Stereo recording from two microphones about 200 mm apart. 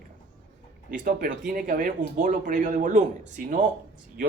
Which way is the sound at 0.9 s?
45° right (ahead or behind).